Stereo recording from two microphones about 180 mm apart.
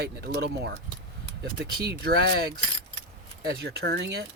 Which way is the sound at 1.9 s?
60° right (ahead or behind).